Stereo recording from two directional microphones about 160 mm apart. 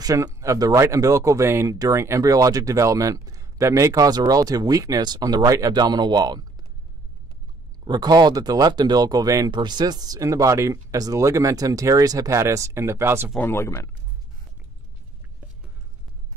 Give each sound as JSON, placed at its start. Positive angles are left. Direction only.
{"t": 0.0, "sound": "speech", "side_deg": -20}
{"t": 7.8, "sound": "speech", "side_deg": -25}
{"t": 13.4, "sound": "speech", "side_deg": 15}